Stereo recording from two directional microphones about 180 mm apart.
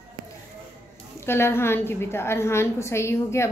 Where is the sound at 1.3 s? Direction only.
15° left (ahead or behind).